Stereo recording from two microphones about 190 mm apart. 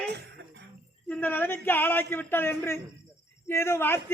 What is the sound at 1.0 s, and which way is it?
A man's voice, 10° left (ahead or behind).